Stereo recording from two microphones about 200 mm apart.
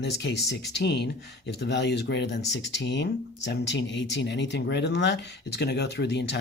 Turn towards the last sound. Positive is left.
turn(degrees=60)  # may be behind; listen again after turning